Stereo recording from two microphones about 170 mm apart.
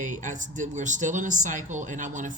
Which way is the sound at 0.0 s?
50° right (ahead or behind).